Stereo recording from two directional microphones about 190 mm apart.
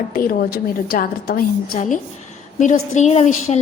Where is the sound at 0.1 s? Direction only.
50° left (ahead or behind).